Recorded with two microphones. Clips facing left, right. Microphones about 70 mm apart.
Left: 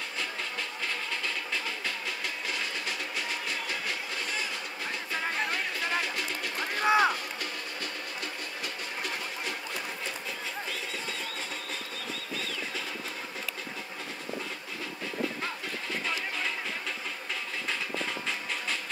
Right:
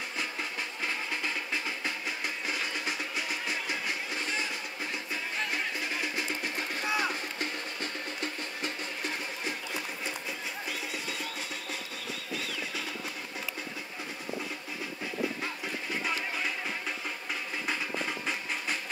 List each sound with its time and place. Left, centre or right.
0.8 s music: centre
6.1 s music: right
6.8 s run: left
7.3 s music: right
12.4 s music: centre